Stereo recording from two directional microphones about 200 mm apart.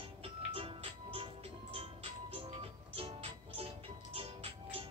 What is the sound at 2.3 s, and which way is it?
Music, 30° right (ahead or behind).